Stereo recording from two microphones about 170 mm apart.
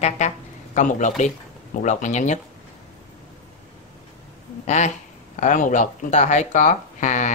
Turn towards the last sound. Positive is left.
turn(degrees=45)  # may be behind; listen again after turning